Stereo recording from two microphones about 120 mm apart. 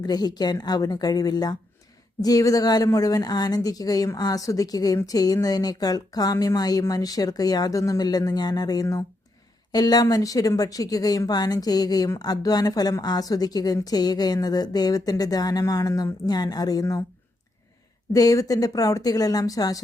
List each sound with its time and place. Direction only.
0.0 s speech: 35° left (ahead or behind)
18.1 s speech: 30° left (ahead or behind)